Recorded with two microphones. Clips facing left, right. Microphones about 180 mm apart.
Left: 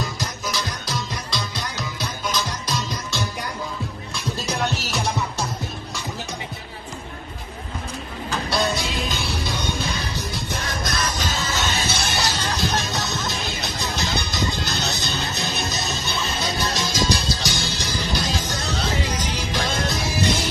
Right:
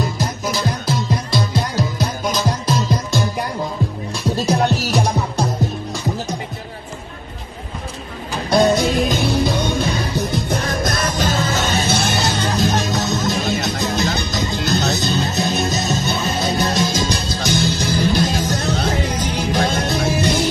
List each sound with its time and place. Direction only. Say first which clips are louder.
0.2 s music: right 7 dB; 50° right (ahead or behind)
4.5 s music: right 8 dB; 40° right (ahead or behind)
8.5 s music: right 11 dB; 50° right (ahead or behind)
12.6 s music: right 6 dB; 45° right (ahead or behind)